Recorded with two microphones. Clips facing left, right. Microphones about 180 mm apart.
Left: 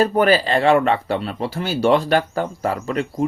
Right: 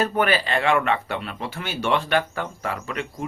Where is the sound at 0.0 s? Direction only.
35° left (ahead or behind).